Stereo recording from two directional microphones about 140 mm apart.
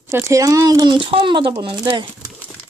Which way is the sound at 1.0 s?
40° right (ahead or behind).